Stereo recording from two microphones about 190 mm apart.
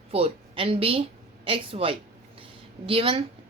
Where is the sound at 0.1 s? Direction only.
30° right (ahead or behind).